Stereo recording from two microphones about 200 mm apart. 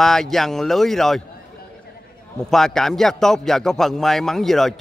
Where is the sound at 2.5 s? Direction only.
Centre (ahead or behind).